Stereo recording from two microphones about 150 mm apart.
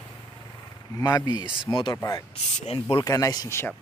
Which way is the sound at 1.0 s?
25° left (ahead or behind).